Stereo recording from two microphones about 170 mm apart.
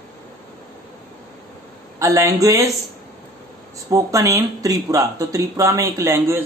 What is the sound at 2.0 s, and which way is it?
Speech, 20° right (ahead or behind).